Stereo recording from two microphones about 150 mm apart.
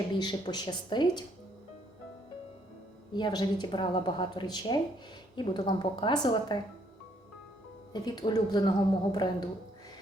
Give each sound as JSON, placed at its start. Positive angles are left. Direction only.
{"t": 0.1, "sound": "a woman's voice", "side_deg": 30}
{"t": 3.1, "sound": "a woman's voice", "side_deg": 30}
{"t": 7.9, "sound": "a woman's voice", "side_deg": 30}